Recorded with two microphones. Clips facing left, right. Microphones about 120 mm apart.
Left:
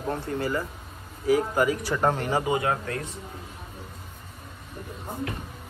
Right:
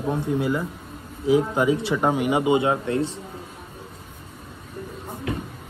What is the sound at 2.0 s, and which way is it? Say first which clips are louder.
Speech: right 3 dB; 10° right (ahead or behind).